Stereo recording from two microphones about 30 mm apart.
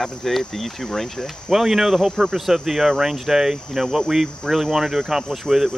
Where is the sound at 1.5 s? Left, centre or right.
Centre.